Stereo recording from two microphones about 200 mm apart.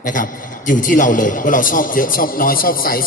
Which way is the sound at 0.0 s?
40° left (ahead or behind).